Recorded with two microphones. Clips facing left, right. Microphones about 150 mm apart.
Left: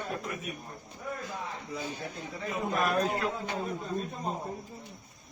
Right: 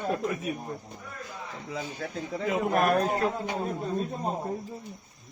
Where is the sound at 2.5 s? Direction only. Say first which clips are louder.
Right 5 dB; 70° right (ahead or behind).